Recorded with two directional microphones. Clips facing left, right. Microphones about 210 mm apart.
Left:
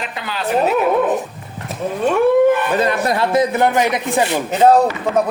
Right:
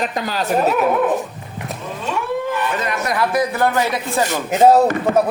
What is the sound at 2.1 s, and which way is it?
Wild animals, 55° left (ahead or behind).